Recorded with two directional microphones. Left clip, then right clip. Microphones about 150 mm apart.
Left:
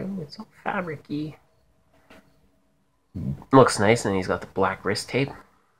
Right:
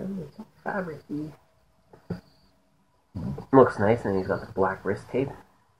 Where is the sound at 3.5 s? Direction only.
35° left (ahead or behind).